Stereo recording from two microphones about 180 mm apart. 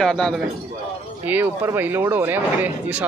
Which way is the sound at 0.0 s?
5° left (ahead or behind).